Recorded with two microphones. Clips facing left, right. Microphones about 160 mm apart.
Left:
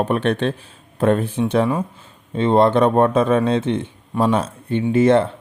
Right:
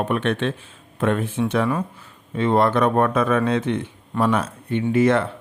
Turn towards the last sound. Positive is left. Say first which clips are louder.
# left 3 dB
turn(degrees=30)  # may be behind; listen again after turning